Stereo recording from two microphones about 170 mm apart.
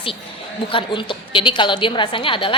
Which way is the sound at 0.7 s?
30° left (ahead or behind).